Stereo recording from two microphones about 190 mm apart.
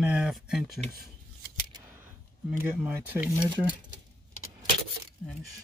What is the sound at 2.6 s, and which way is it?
Speech, 10° right (ahead or behind).